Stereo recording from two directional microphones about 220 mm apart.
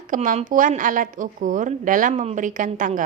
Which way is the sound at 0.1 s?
35° right (ahead or behind).